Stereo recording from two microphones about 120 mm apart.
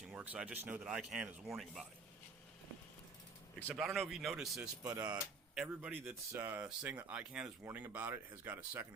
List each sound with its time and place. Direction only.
0.1 s speech: 10° right (ahead or behind)
3.8 s speech: centre (ahead or behind)
4.9 s speech: 35° right (ahead or behind)
5.5 s speech: 5° right (ahead or behind)
6.3 s speech: 20° right (ahead or behind)